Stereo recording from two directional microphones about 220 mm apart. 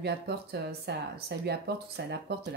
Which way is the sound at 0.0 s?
50° right (ahead or behind).